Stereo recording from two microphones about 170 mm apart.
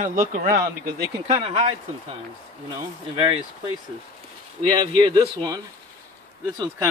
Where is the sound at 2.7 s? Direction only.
30° right (ahead or behind).